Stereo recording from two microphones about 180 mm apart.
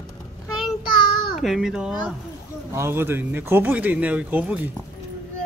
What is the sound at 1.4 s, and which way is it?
Speech, centre (ahead or behind).